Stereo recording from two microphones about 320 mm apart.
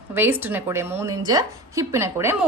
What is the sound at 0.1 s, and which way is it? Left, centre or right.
A woman's voice, centre.